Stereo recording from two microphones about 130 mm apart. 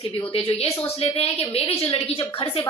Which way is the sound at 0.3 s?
45° left (ahead or behind).